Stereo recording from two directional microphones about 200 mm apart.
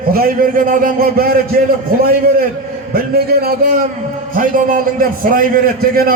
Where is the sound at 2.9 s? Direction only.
50° right (ahead or behind).